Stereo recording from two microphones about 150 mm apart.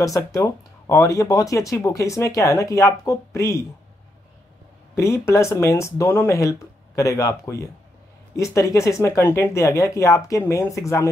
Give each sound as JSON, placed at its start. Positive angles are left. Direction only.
{"t": 0.0, "sound": "speech", "side_deg": 20}
{"t": 4.9, "sound": "speech", "side_deg": 20}